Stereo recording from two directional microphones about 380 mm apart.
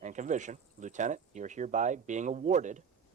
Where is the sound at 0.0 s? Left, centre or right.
Centre.